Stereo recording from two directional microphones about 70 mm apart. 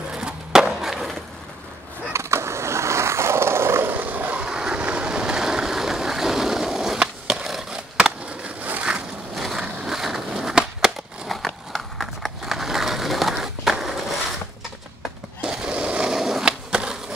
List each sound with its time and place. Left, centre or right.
0.1 s skateboard: centre
2.1 s skateboard: right
4.5 s vehicle: centre
8.6 s a sound: right
8.9 s a sound: centre
15.4 s skateboard: centre